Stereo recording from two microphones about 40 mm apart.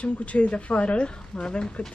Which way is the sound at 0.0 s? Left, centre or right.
Left.